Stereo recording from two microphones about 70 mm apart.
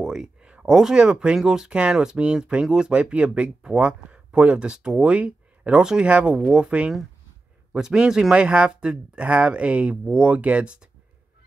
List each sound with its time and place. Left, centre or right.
0.0 s speech: centre